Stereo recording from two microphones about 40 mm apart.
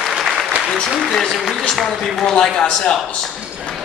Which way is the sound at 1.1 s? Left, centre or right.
Centre.